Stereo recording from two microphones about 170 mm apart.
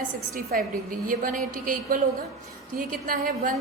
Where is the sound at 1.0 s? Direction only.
55° right (ahead or behind).